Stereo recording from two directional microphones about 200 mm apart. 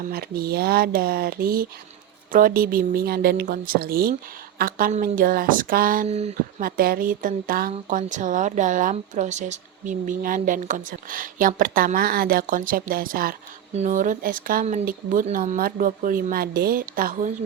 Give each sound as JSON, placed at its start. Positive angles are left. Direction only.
{"t": 0.1, "sound": "speech", "side_deg": -50}
{"t": 6.6, "sound": "speech", "side_deg": -45}